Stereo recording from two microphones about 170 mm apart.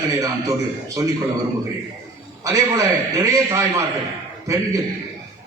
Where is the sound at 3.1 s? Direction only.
20° right (ahead or behind).